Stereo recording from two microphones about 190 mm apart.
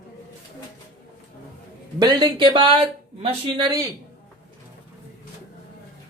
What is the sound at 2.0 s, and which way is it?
Speech, 20° right (ahead or behind).